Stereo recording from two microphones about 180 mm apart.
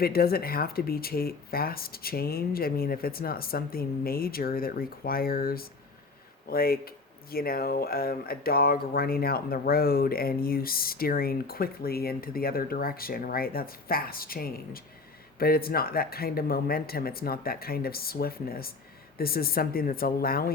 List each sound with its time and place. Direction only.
0.0 s speech: 55° left (ahead or behind)